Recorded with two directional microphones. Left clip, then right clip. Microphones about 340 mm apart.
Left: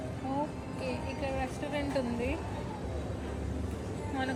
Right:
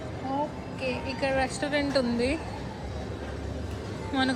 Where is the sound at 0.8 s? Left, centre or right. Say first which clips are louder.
Right 7 dB; right.